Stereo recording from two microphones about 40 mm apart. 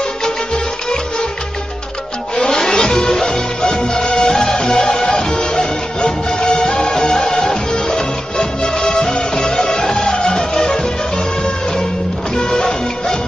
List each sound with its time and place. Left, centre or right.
2.3 s music: centre
12.4 s music: centre